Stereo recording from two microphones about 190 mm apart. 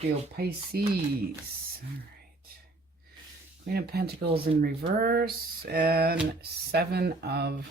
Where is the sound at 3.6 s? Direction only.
55° right (ahead or behind).